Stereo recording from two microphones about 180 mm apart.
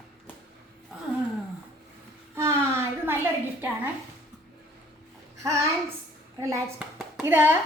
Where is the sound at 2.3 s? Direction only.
15° right (ahead or behind).